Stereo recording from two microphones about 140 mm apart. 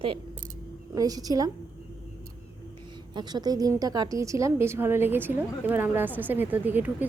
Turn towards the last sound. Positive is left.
turn(degrees=-15)  # may be behind; listen again after turning